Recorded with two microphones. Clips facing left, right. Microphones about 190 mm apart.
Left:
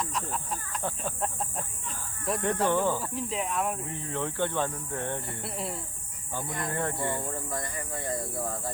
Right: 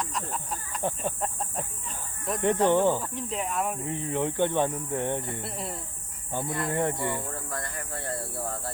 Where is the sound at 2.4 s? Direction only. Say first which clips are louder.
Right 5 dB; 20° right (ahead or behind).